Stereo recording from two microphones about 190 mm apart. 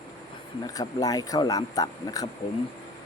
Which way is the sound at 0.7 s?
20° left (ahead or behind).